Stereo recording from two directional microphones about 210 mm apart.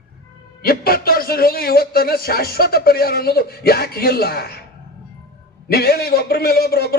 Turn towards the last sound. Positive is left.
turn(degrees=50)  # may be behind; listen again after turning